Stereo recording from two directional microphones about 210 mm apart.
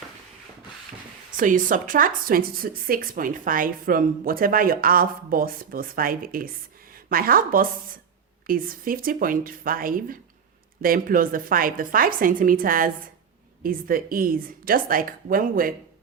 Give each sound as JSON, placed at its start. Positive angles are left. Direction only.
{"t": 1.4, "sound": "a woman's voice", "side_deg": -40}